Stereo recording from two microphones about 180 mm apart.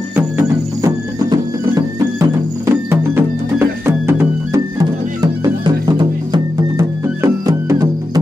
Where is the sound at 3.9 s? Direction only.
15° right (ahead or behind).